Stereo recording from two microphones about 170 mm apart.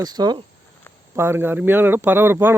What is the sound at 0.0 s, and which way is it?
Speech, 25° right (ahead or behind).